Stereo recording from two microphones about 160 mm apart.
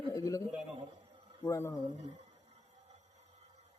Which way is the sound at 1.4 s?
20° left (ahead or behind).